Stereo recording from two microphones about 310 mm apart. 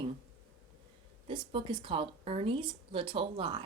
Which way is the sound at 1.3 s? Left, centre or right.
Centre.